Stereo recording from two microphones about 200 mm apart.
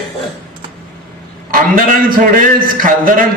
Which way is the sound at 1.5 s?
45° right (ahead or behind).